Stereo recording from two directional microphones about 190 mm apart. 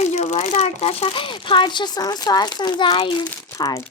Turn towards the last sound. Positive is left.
turn(degrees=20)  # may be behind; listen again after turning